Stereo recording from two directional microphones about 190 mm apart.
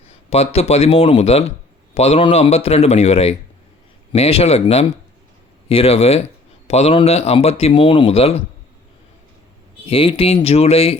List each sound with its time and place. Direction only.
0.1 s speech: 35° left (ahead or behind)
9.8 s speech: 30° left (ahead or behind)